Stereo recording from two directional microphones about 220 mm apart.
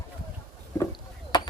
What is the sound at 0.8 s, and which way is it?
Rowboat, 20° left (ahead or behind).